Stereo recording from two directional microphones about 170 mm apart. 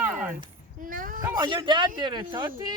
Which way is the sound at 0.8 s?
55° right (ahead or behind).